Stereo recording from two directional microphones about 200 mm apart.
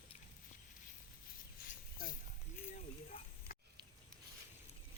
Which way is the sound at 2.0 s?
45° left (ahead or behind).